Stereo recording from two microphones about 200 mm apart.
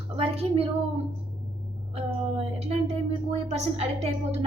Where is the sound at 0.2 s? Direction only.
30° right (ahead or behind).